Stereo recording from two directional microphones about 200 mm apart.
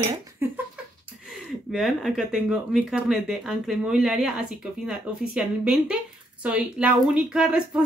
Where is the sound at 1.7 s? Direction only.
Centre (ahead or behind).